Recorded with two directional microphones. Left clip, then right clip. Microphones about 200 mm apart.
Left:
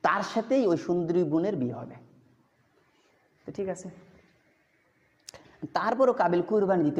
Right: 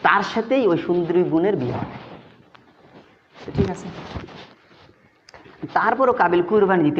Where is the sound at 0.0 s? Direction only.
60° left (ahead or behind).